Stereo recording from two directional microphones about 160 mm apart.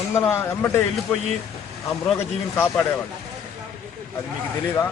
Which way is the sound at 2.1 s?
15° left (ahead or behind).